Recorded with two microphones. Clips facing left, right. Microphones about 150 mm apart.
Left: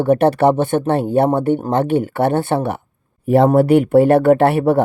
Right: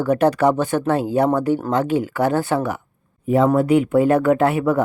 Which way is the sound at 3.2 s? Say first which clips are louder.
Left 4 dB; 70° left (ahead or behind).